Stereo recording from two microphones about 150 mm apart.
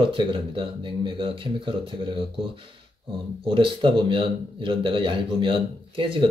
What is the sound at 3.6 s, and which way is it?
A man's voice, 35° right (ahead or behind).